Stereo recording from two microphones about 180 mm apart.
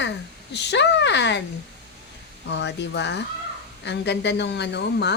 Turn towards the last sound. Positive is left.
turn(degrees=70)  # may be behind; listen again after turning